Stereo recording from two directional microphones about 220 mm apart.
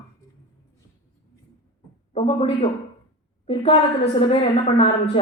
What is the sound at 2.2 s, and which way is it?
Speech, 25° left (ahead or behind).